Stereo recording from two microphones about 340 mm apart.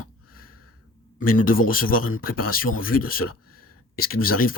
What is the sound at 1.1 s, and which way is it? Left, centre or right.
Speech, left.